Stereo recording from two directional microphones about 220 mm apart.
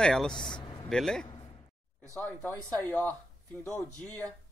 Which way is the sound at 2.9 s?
10° left (ahead or behind).